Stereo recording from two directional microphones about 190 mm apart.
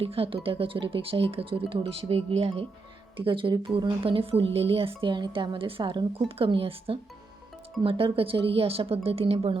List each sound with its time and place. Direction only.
0.0 s speech: 30° right (ahead or behind)